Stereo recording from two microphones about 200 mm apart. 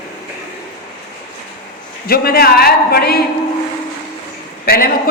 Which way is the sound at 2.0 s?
50° left (ahead or behind).